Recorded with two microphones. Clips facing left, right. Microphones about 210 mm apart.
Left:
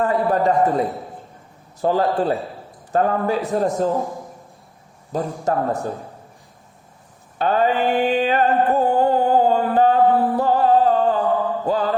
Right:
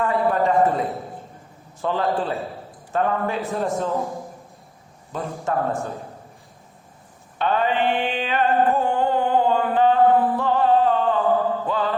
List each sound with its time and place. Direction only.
0.0 s a sound: 40° left (ahead or behind)
1.8 s a man's voice: 40° left (ahead or behind)
5.1 s a man's voice: 40° left (ahead or behind)
7.3 s music: 40° left (ahead or behind)
11.6 s mantra: 40° left (ahead or behind)